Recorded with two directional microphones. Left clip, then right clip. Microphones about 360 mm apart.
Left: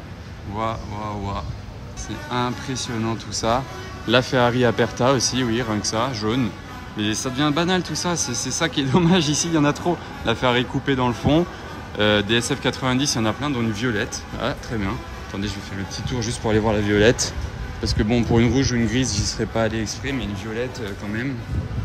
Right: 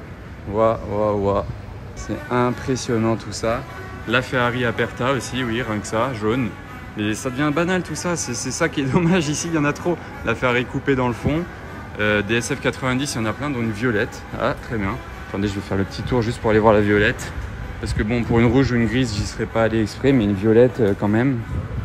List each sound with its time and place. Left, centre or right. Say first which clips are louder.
0.5 s speech: right 8 dB; centre
2.0 s speech: right 4 dB; centre